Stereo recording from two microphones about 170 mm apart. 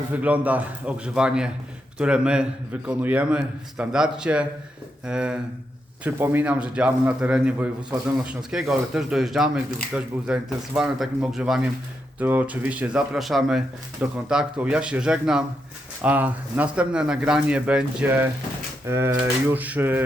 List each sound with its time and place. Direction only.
0.1 s a man's voice: 10° right (ahead or behind)